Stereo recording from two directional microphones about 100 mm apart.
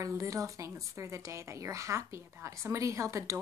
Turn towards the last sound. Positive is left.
turn(degrees=-30)  # may be behind; listen again after turning